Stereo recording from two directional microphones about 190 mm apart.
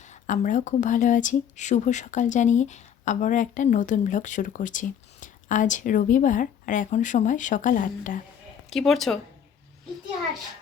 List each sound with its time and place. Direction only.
0.0 s speech: 40° left (ahead or behind)
8.7 s speech: centre (ahead or behind)